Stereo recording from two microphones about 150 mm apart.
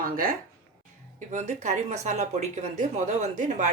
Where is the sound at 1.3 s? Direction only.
50° right (ahead or behind).